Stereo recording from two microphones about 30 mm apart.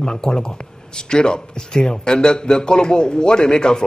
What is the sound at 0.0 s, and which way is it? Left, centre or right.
Speech, left.